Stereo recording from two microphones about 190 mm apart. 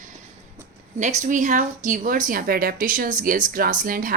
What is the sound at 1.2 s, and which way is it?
Speech, 40° right (ahead or behind).